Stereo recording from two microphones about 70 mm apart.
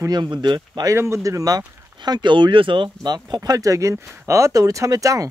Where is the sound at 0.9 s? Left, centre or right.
Right.